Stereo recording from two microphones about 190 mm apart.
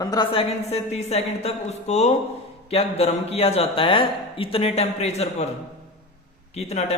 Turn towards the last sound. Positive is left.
turn(degrees=35)  # may be behind; listen again after turning